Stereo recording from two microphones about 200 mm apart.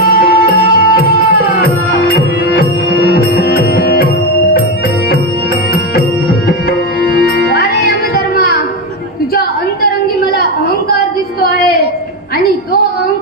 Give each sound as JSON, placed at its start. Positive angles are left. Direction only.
{"t": 0.0, "sound": "music", "side_deg": 50}
{"t": 3.7, "sound": "music", "side_deg": 50}
{"t": 7.2, "sound": "music", "side_deg": 55}